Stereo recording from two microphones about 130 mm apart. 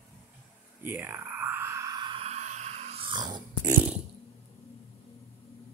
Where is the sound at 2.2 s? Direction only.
60° right (ahead or behind).